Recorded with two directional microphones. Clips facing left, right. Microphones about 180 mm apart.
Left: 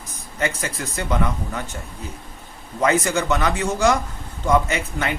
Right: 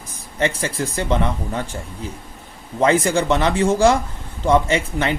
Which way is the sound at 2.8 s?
30° right (ahead or behind).